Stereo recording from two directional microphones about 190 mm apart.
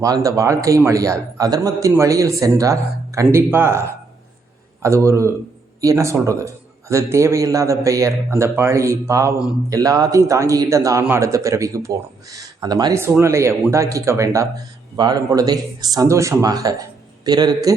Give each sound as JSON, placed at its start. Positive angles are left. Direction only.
{"t": 0.0, "sound": "speech", "side_deg": -15}